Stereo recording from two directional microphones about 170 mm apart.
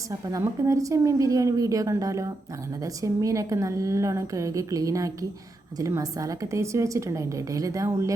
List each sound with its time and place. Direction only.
0.1 s a woman's voice: 20° right (ahead or behind)